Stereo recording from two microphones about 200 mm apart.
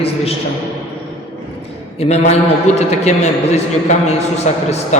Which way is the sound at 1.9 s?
30° left (ahead or behind).